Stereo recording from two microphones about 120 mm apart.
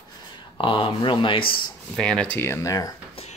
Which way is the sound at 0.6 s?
45° left (ahead or behind).